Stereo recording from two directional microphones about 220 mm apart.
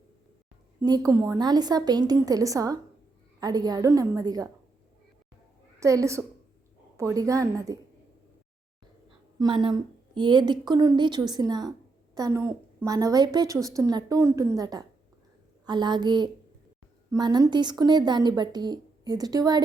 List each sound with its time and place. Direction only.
0.8 s a woman's voice: 15° right (ahead or behind)
5.8 s a woman's voice: 15° right (ahead or behind)
9.4 s a woman's voice: 20° right (ahead or behind)